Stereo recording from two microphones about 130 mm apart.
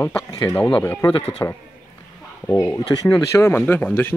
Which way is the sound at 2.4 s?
15° left (ahead or behind).